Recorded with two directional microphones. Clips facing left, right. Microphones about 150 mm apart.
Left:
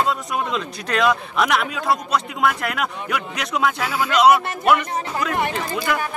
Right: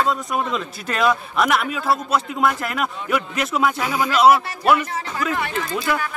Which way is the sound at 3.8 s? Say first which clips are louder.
Right 1 dB; 15° right (ahead or behind).